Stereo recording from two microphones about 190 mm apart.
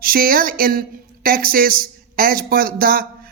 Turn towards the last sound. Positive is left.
turn(degrees=-50)  # may be behind; listen again after turning